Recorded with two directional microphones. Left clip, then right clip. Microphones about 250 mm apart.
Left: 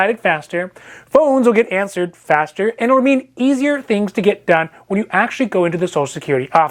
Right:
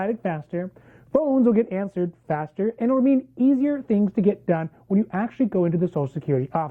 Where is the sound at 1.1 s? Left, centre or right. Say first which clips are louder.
Left 8 dB; left.